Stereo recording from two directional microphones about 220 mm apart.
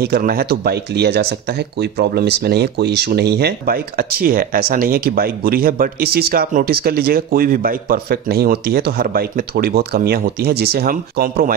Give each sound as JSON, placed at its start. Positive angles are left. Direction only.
{"t": 0.0, "sound": "speech", "side_deg": -45}